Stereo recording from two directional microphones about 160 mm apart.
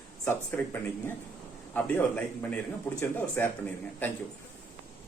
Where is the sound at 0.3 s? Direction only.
15° left (ahead or behind).